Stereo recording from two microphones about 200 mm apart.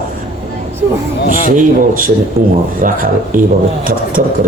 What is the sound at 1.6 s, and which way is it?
Speech, 45° right (ahead or behind).